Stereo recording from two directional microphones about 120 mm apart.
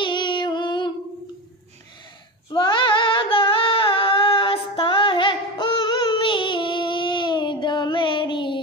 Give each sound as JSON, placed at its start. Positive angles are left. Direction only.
{"t": 0.0, "sound": "female singing", "side_deg": 40}
{"t": 2.5, "sound": "female singing", "side_deg": 45}